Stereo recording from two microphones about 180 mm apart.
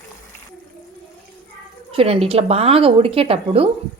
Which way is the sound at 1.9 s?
30° right (ahead or behind).